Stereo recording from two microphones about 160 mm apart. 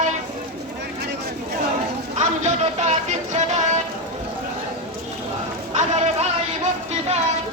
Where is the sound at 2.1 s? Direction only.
45° right (ahead or behind).